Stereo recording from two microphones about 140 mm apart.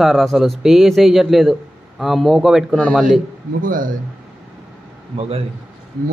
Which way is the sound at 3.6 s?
75° right (ahead or behind).